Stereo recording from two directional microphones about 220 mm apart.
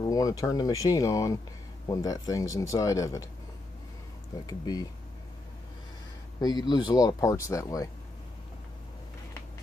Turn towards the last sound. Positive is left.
turn(degrees=15)  # may be behind; listen again after turning